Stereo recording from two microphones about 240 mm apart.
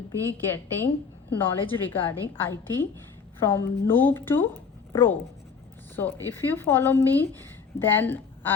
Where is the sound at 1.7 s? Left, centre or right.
Centre.